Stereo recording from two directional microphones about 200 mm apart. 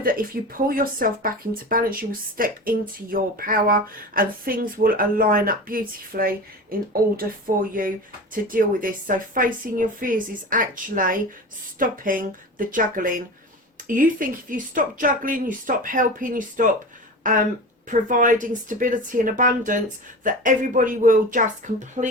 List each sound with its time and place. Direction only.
0.0 s speech: 45° right (ahead or behind)